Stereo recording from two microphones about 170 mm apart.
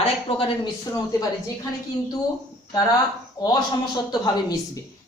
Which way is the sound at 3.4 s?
25° left (ahead or behind).